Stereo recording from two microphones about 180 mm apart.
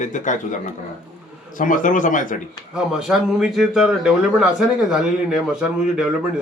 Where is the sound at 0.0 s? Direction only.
45° left (ahead or behind).